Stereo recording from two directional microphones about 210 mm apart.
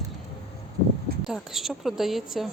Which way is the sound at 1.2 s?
Centre (ahead or behind).